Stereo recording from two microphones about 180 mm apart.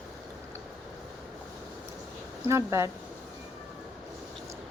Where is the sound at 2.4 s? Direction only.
15° right (ahead or behind).